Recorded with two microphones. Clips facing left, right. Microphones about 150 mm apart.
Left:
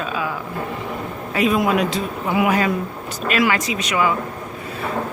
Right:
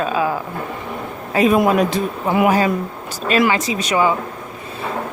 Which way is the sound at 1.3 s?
45° right (ahead or behind).